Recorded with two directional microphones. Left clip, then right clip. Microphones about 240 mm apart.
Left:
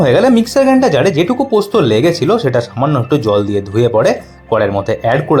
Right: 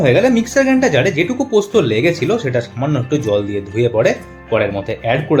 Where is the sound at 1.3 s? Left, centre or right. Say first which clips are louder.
Left 2 dB; left.